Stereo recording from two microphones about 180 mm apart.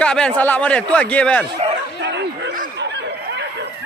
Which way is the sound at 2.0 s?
75° right (ahead or behind).